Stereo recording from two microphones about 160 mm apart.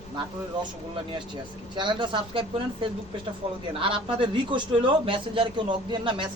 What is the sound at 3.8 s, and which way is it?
Speech, 30° right (ahead or behind).